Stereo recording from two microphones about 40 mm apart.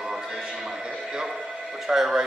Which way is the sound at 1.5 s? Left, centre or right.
Centre.